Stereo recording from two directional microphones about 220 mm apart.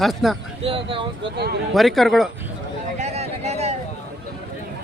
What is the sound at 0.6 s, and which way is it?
Speech, 25° right (ahead or behind).